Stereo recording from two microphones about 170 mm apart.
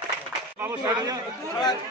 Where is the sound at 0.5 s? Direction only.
15° right (ahead or behind).